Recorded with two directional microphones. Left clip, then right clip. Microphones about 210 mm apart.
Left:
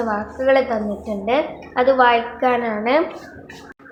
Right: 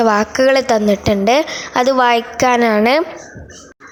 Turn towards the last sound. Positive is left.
turn(degrees=-60)  # may be behind; listen again after turning